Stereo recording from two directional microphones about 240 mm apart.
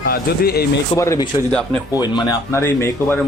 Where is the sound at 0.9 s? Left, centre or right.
Centre.